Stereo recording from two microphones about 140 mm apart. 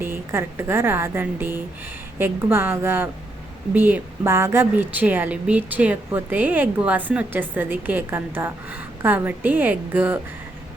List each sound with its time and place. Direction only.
0.0 s a woman's voice: 15° right (ahead or behind)